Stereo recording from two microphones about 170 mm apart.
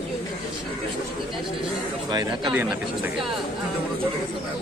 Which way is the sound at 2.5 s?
10° right (ahead or behind).